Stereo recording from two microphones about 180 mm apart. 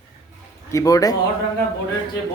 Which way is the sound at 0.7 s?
20° left (ahead or behind).